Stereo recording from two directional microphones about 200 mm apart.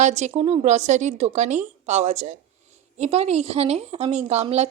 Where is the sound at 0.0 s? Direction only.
35° right (ahead or behind).